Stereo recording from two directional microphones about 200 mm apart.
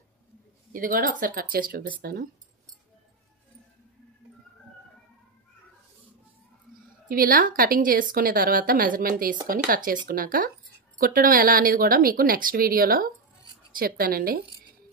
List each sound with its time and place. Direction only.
0.7 s a woman's voice: 45° right (ahead or behind)
7.1 s a woman's voice: 45° right (ahead or behind)